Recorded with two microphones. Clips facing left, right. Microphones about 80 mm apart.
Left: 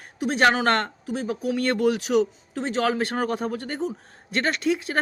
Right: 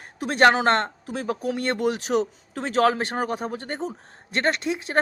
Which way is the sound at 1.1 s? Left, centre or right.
Right.